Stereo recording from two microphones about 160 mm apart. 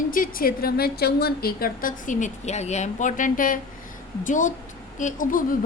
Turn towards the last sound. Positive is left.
turn(degrees=55)  # may be behind; listen again after turning